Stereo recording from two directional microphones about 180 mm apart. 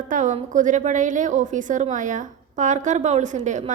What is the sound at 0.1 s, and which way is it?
A woman's voice, 45° right (ahead or behind).